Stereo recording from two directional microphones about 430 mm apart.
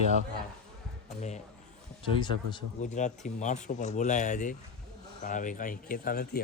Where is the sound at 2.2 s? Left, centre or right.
Centre.